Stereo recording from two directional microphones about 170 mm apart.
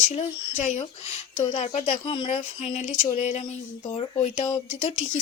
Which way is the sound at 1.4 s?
40° left (ahead or behind).